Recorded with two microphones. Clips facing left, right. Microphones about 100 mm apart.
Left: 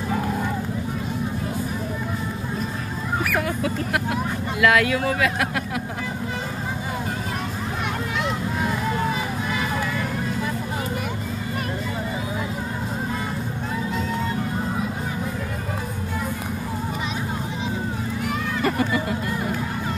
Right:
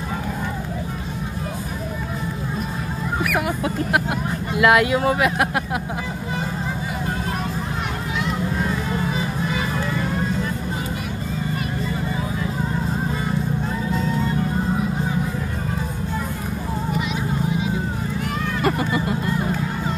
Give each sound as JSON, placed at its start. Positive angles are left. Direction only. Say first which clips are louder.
{"t": 3.3, "sound": "speech", "louder": "right 2 dB", "side_deg": -20}
{"t": 18.6, "sound": "vehicle", "louder": "right 1 dB", "side_deg": -20}